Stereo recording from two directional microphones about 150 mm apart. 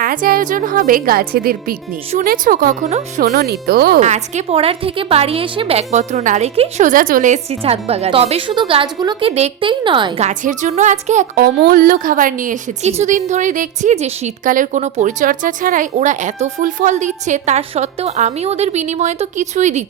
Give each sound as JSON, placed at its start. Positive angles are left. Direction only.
{"t": 0.0, "sound": "a woman's voice", "side_deg": -70}
{"t": 2.1, "sound": "a woman's voice", "side_deg": -65}
{"t": 3.2, "sound": "speech", "side_deg": -85}
{"t": 4.0, "sound": "a woman's voice", "side_deg": -50}
{"t": 6.9, "sound": "a woman's voice", "side_deg": -65}
{"t": 7.5, "sound": "a woman's voice", "side_deg": -40}
{"t": 10.2, "sound": "a woman's voice", "side_deg": -50}
{"t": 11.4, "sound": "a woman's voice", "side_deg": -90}